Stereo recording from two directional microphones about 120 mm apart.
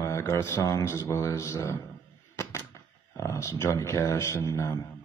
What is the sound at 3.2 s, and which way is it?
Speech, 25° left (ahead or behind).